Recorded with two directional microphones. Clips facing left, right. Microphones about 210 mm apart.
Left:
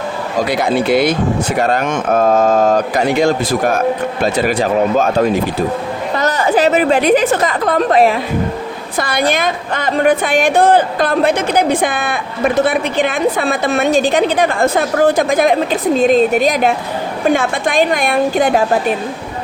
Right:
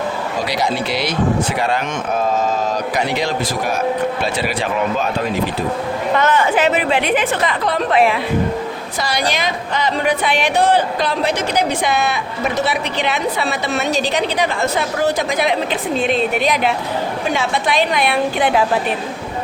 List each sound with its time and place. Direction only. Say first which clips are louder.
0.5 s a woman's voice: left 8 dB; 55° left (ahead or behind)
6.1 s a woman's voice: left 2 dB; 40° left (ahead or behind)
9.0 s a woman's voice: left 5 dB; 55° left (ahead or behind)